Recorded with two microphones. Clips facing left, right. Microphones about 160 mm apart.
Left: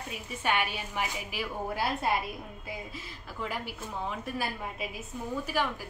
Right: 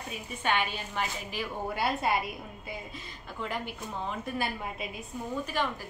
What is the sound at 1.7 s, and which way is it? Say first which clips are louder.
Speech: right 1 dB; centre (ahead or behind).